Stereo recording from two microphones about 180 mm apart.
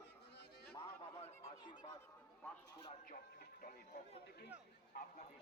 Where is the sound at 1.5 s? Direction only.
25° left (ahead or behind).